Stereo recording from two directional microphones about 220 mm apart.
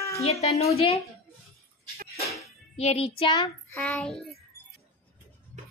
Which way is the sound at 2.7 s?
30° left (ahead or behind).